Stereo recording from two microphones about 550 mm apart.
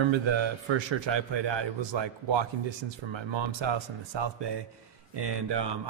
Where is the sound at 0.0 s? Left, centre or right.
Right.